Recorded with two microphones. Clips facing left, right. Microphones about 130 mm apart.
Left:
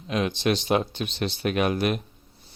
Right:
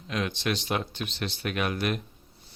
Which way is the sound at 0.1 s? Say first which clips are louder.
Left 5 dB; 20° left (ahead or behind).